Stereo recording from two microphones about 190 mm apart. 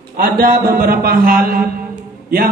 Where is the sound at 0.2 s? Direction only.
50° right (ahead or behind).